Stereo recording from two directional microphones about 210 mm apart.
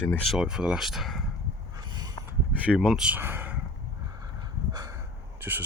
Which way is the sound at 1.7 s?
20° right (ahead or behind).